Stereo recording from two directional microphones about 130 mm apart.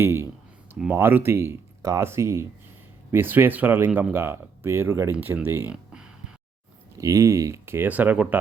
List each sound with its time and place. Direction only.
0.0 s speech: 20° right (ahead or behind)
6.9 s speech: 25° right (ahead or behind)